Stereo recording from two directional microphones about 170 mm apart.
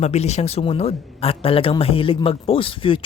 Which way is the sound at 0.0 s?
40° left (ahead or behind).